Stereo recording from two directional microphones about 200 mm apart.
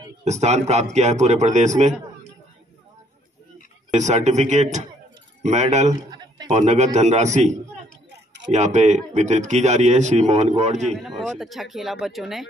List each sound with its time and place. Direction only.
0.2 s speech: 35° right (ahead or behind)
3.9 s speech: 35° right (ahead or behind)
6.1 s a sound: 20° right (ahead or behind)
6.5 s speech: 35° right (ahead or behind)
10.9 s speech: centre (ahead or behind)